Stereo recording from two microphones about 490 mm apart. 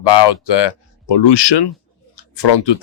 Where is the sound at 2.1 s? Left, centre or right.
Left.